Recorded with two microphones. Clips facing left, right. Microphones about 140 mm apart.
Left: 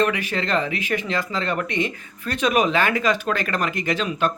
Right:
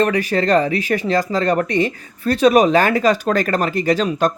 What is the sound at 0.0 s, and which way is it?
Speech, 40° right (ahead or behind).